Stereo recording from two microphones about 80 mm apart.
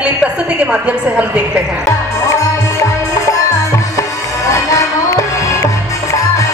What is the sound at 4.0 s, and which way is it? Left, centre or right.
Music, left.